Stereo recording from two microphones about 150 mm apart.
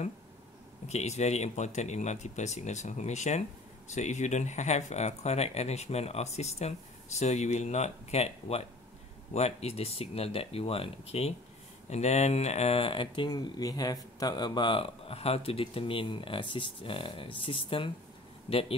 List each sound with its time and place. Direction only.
0.8 s speech: 50° left (ahead or behind)